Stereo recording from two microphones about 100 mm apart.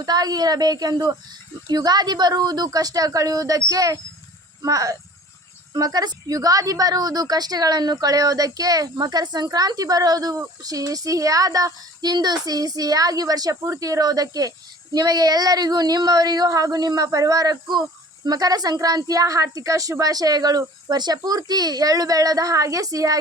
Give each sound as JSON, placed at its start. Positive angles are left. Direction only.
{"t": 0.0, "sound": "a woman's voice", "side_deg": -40}